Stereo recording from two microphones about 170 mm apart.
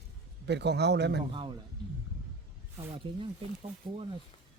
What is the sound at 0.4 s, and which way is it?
Speech, 85° right.